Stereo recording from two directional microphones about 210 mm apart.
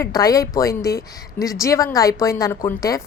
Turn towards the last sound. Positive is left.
turn(degrees=15)  # may be behind; listen again after turning